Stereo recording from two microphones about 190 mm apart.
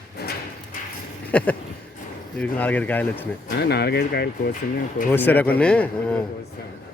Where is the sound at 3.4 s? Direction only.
60° left (ahead or behind).